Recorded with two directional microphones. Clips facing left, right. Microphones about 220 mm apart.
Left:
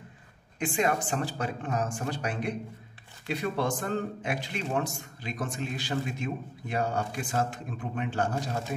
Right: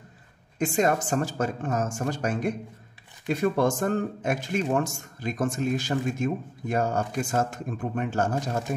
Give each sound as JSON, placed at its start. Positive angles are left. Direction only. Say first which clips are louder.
{"t": 0.6, "sound": "a man's voice", "louder": "right 4 dB", "side_deg": -45}